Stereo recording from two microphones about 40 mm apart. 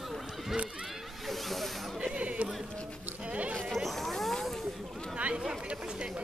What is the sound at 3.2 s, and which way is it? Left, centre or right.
Sheep, right.